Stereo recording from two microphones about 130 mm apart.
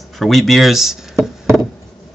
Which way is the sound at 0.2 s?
Centre (ahead or behind).